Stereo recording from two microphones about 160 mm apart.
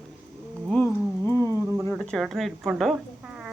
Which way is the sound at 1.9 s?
Centre (ahead or behind).